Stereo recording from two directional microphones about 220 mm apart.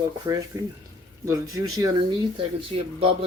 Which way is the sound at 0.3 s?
15° right (ahead or behind).